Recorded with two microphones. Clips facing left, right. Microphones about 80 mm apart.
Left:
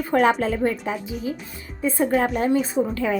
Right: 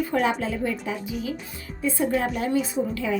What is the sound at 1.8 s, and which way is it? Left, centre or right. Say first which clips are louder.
A woman's voice: left 3 dB; left.